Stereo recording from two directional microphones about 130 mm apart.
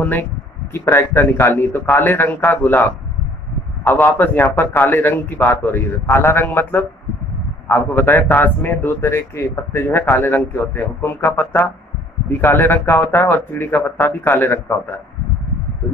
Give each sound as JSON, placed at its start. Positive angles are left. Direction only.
{"t": 0.0, "sound": "a man's voice", "side_deg": 15}